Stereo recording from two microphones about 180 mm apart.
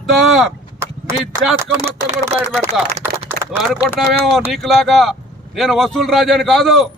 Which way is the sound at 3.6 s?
Centre (ahead or behind).